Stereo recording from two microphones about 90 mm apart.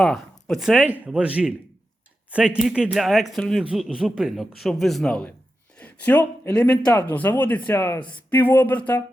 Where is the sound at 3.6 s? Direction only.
5° right (ahead or behind); by 6.9 s 10° left (ahead or behind).